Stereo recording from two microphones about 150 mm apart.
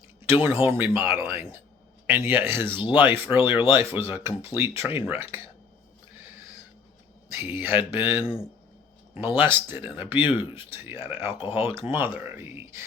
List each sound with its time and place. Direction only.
0.7 s speech: 15° right (ahead or behind)
2.6 s speech: 30° left (ahead or behind)
2.9 s speech: 15° right (ahead or behind)
7.3 s speech: 10° right (ahead or behind)